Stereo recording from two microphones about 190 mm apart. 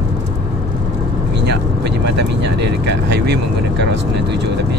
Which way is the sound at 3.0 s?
60° right (ahead or behind).